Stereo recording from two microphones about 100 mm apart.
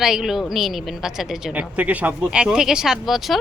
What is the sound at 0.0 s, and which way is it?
Speech, 5° right (ahead or behind).